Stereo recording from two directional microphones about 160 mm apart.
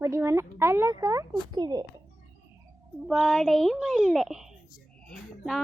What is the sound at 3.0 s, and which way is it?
A child's voice, centre (ahead or behind).